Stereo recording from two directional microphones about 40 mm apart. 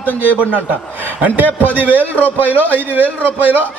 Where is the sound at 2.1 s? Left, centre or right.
Left.